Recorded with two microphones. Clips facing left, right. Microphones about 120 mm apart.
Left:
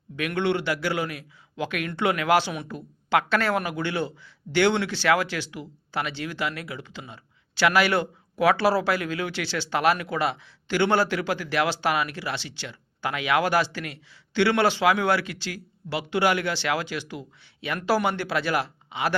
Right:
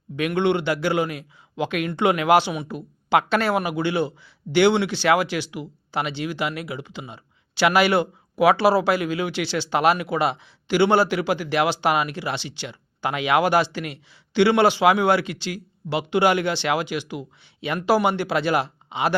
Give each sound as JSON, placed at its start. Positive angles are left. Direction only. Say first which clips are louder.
{"t": 0.2, "sound": "a man's voice", "louder": "right 4 dB", "side_deg": -20}